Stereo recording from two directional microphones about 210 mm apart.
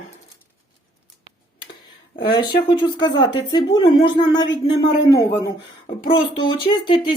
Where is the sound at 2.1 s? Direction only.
20° left (ahead or behind).